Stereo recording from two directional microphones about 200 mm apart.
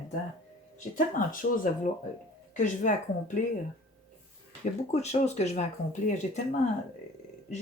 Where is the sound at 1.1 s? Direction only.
45° left (ahead or behind).